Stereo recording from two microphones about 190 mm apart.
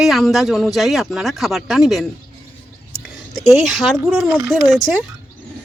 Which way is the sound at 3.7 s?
Centre (ahead or behind).